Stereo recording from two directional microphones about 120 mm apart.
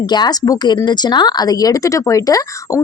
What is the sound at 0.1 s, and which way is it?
Speech, 35° left (ahead or behind).